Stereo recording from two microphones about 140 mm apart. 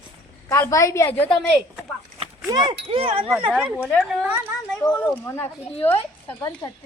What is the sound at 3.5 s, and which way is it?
Speech, 10° right (ahead or behind).